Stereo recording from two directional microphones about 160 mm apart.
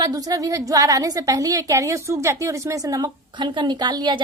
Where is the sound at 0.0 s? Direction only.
20° right (ahead or behind).